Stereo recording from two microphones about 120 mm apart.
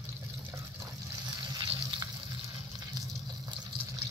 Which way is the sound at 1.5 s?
40° right (ahead or behind).